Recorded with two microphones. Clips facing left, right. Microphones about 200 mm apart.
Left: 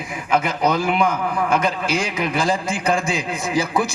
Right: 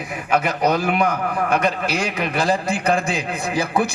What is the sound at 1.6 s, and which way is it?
A man's voice, 65° right (ahead or behind).